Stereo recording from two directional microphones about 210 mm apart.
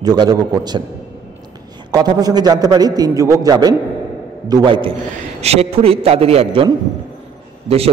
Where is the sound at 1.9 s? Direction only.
20° right (ahead or behind).